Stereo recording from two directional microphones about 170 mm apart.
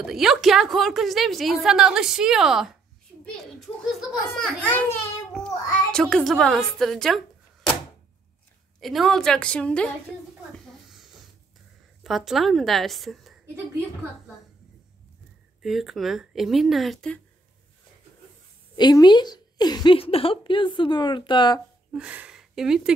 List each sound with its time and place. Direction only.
0.0 s a woman's voice: centre (ahead or behind)
8.7 s a woman's voice: centre (ahead or behind)
15.6 s a woman's voice: centre (ahead or behind)
18.8 s a woman's voice: 25° left (ahead or behind)
21.9 s speech: 5° right (ahead or behind)